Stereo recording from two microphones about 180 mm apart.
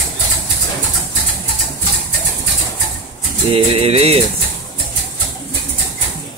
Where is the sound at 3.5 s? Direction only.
35° right (ahead or behind).